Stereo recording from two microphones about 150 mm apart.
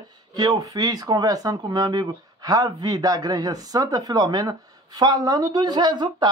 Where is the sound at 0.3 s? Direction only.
25° right (ahead or behind).